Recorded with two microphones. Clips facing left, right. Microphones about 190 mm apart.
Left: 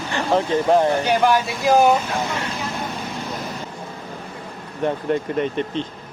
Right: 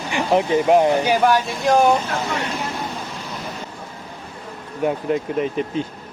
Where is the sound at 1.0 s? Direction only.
Centre (ahead or behind).